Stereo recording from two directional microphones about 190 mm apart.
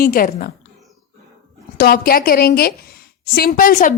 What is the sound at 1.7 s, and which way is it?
A woman's voice, 50° left (ahead or behind).